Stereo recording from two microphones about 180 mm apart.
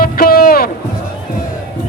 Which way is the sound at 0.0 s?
55° left (ahead or behind).